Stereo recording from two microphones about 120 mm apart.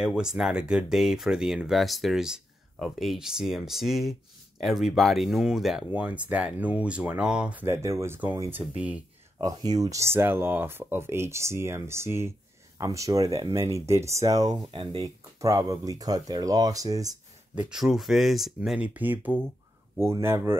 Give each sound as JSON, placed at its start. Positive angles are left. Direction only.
{"t": 0.0, "sound": "speech", "side_deg": -5}
{"t": 7.6, "sound": "speech", "side_deg": -25}
{"t": 9.4, "sound": "speech", "side_deg": -30}
{"t": 14.7, "sound": "speech", "side_deg": -45}
{"t": 15.0, "sound": "speech", "side_deg": -25}
{"t": 17.6, "sound": "speech", "side_deg": -5}